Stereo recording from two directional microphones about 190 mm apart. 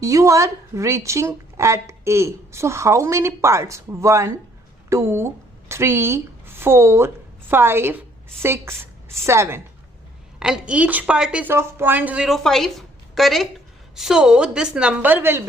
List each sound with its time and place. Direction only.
0.0 s a woman's voice: 15° right (ahead or behind)
10.4 s a woman's voice: 5° right (ahead or behind)